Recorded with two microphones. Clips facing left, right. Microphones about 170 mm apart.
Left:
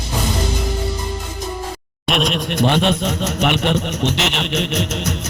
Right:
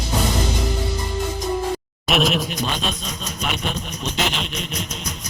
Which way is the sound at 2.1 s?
Centre (ahead or behind).